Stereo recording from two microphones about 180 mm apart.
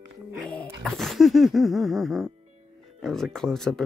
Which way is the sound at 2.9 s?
Centre (ahead or behind).